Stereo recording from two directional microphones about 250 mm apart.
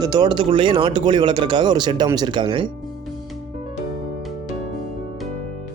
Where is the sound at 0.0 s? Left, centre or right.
Centre.